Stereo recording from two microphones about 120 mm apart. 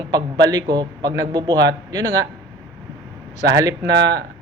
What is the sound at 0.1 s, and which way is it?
A man's voice, 30° right (ahead or behind).